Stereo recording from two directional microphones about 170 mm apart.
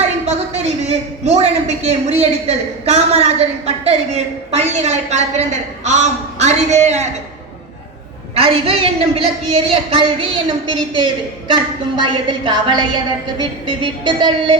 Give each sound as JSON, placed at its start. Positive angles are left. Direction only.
{"t": 0.3, "sound": "a woman's voice", "side_deg": -40}
{"t": 8.4, "sound": "a woman's voice", "side_deg": -35}